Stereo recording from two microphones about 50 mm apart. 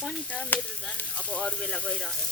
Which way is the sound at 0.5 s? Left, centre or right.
Left.